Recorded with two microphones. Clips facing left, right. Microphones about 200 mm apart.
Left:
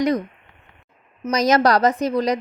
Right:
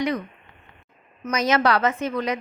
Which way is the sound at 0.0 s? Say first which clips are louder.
Left 5 dB; 40° left (ahead or behind).